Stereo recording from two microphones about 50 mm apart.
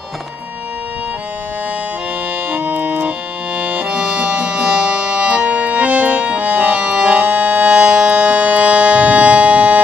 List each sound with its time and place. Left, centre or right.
2.5 s music: right
3.5 s accordion: right
3.9 s music: centre; by 9.8 s right